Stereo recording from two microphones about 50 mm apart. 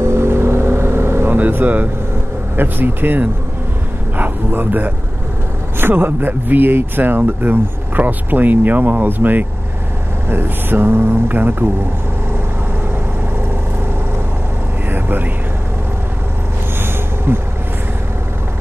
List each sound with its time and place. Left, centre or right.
0.0 s vehicle: right
1.3 s speech: right
14.9 s music: right
17.3 s speech: right